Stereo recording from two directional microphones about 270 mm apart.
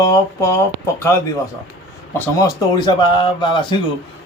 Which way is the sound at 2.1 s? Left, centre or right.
Centre.